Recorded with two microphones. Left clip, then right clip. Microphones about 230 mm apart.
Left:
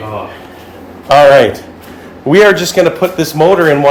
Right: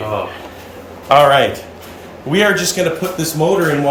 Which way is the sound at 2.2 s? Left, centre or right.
Left.